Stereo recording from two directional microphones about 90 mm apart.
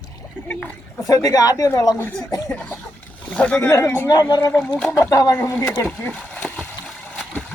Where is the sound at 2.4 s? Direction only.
15° left (ahead or behind).